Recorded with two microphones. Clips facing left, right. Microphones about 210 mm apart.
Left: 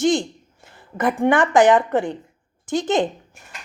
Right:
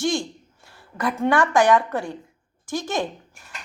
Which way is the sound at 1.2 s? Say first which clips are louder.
Left 3 dB; 20° left (ahead or behind).